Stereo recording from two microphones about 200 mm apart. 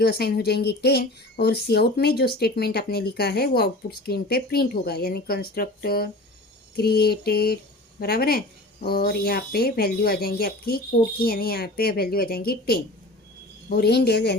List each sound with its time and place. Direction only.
0.0 s speech: 55° left (ahead or behind)